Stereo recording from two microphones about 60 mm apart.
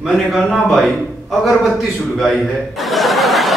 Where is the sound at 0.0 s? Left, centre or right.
Centre.